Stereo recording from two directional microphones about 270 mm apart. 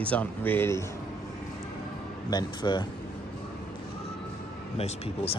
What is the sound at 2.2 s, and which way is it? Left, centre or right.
Speech, centre.